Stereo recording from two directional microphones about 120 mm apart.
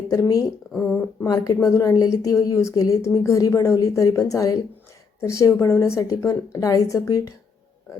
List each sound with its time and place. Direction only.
0.1 s a woman's voice: 30° left (ahead or behind)